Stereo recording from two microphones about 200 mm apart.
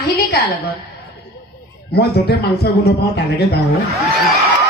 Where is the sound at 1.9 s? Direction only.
55° left (ahead or behind).